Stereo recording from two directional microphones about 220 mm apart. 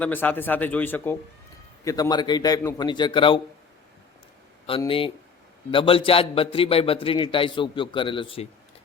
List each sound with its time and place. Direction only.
0.0 s a man's voice: 5° left (ahead or behind); by 3.4 s 25° left (ahead or behind)
4.6 s a man's voice: 25° left (ahead or behind)